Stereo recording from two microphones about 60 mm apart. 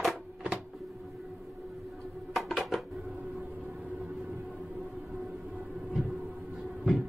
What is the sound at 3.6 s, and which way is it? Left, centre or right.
Vehicle, centre.